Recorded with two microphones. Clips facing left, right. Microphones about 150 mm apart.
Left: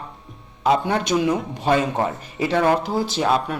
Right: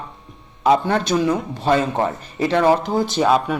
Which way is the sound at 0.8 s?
15° left (ahead or behind).